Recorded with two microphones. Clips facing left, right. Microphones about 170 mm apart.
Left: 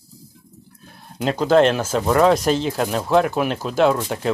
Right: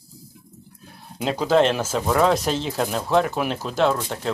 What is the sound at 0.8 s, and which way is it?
Speech, 5° right (ahead or behind).